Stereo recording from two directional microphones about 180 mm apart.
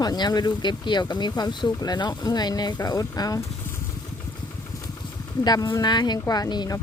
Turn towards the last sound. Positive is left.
turn(degrees=20)  # may be behind; listen again after turning